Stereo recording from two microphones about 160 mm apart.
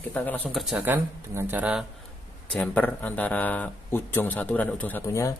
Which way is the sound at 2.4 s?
10° left (ahead or behind).